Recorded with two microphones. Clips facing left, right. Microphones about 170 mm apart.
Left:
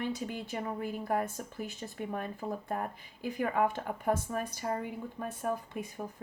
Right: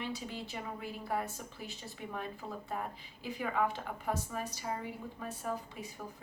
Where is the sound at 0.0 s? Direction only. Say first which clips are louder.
Left 5 dB; 50° left (ahead or behind).